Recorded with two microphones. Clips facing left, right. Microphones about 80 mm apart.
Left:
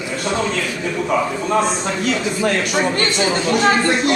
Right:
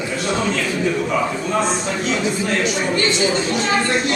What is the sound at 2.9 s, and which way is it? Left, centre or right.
Speech, left.